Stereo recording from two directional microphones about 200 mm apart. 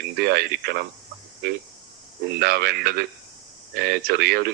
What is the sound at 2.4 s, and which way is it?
Speech, 50° right (ahead or behind).